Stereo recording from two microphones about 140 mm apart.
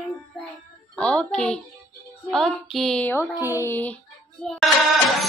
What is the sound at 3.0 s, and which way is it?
Speech, 15° left (ahead or behind).